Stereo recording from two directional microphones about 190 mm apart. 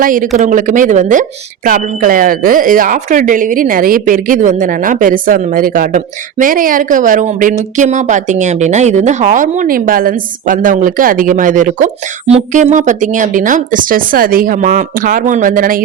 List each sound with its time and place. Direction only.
0.0 s a woman's voice: 45° right (ahead or behind)